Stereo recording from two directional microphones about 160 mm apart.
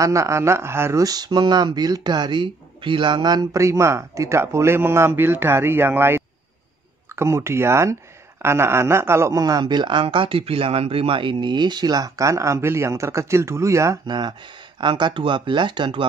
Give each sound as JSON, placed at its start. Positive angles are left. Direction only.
{"t": 0.0, "sound": "speech", "side_deg": -20}